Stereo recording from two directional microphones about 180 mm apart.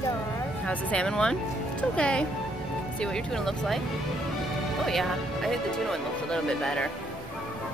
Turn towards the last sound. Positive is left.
turn(degrees=5)  # may be behind; listen again after turning